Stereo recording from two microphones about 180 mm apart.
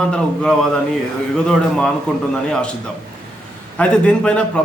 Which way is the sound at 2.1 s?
5° left (ahead or behind).